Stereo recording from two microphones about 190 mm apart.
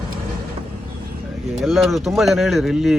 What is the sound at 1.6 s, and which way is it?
Speech, centre (ahead or behind).